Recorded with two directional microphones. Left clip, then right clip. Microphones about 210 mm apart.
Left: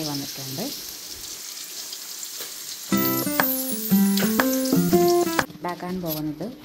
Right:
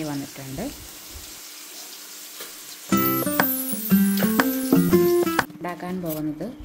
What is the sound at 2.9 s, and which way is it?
Music, centre (ahead or behind).